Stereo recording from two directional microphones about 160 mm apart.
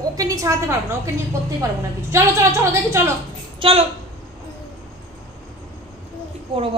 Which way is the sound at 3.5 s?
35° right (ahead or behind).